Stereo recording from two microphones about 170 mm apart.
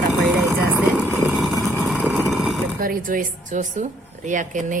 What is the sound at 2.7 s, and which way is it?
A woman's voice, 55° right (ahead or behind).